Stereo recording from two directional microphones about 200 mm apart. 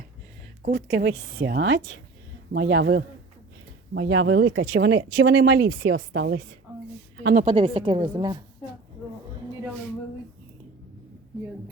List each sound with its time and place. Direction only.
0.6 s a woman's voice: 45° right (ahead or behind)
5.8 s speech: 70° right (ahead or behind)
7.3 s a woman's voice: 30° right (ahead or behind)